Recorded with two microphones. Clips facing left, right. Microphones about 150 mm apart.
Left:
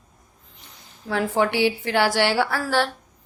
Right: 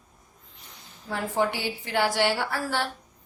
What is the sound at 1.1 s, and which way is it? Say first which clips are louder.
A woman's voice: left 5 dB; 85° left.